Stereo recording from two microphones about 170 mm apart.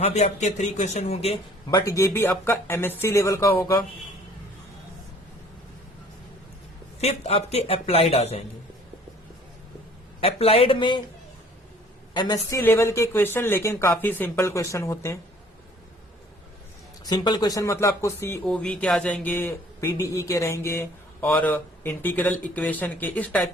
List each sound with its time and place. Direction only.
0.0 s speech: 40° left (ahead or behind)
1.7 s speech: 20° left (ahead or behind)
7.0 s speech: 35° left (ahead or behind)
10.2 s speech: 35° left (ahead or behind)
12.1 s speech: 25° left (ahead or behind)
17.1 s speech: 25° left (ahead or behind); by 23.5 s 10° left (ahead or behind)